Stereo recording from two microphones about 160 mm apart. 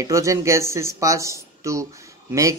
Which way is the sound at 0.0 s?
20° right (ahead or behind).